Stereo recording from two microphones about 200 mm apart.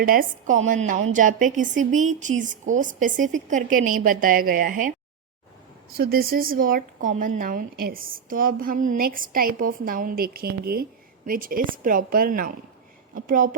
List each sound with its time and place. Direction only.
0.0 s a woman's voice: 45° right (ahead or behind)
6.0 s a woman's voice: 50° right (ahead or behind)